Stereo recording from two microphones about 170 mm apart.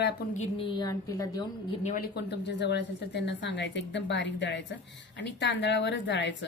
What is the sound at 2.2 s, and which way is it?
A woman's voice, 90° left.